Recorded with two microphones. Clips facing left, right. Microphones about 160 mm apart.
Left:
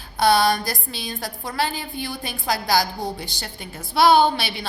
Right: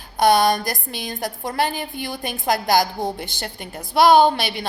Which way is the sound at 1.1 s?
20° right (ahead or behind).